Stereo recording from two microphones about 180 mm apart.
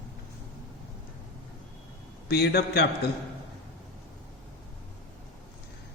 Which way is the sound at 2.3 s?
65° left (ahead or behind).